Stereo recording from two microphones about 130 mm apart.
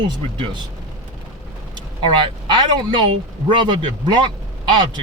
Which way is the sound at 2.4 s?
35° right (ahead or behind).